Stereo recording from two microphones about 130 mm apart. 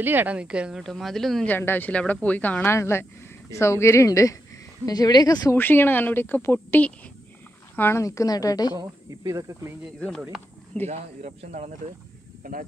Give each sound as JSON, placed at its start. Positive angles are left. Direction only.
{"t": 0.0, "sound": "a woman's voice", "side_deg": -15}
{"t": 1.5, "sound": "a woman's voice", "side_deg": 15}
{"t": 5.6, "sound": "a woman's voice", "side_deg": 15}
{"t": 9.3, "sound": "speech", "side_deg": -25}
{"t": 9.9, "sound": "a woman's voice", "side_deg": 10}
{"t": 10.9, "sound": "speech", "side_deg": -65}
{"t": 12.4, "sound": "speech", "side_deg": -90}